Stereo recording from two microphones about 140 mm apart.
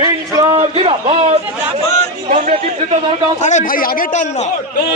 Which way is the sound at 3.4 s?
60° left (ahead or behind).